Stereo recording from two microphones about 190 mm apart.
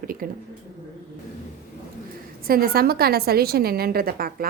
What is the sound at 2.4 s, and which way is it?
A woman's voice, 50° right (ahead or behind).